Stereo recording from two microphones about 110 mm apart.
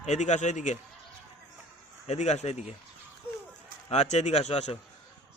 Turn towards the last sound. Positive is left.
turn(degrees=85)